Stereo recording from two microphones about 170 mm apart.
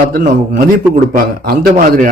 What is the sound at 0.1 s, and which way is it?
Speech, 50° right (ahead or behind).